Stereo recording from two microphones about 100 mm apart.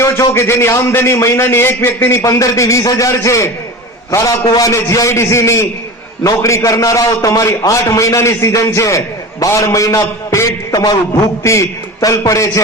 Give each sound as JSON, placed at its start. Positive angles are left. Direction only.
{"t": 0.0, "sound": "a man's voice", "side_deg": 25}